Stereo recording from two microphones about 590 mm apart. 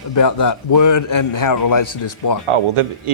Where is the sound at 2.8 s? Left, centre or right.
Right.